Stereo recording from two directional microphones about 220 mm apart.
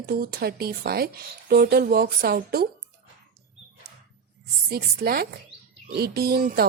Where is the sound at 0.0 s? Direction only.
45° right (ahead or behind).